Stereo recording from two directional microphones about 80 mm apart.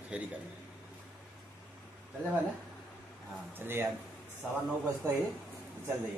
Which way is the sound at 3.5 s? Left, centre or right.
Right.